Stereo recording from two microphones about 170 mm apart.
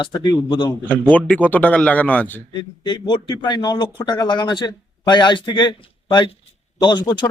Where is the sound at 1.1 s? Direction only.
10° left (ahead or behind).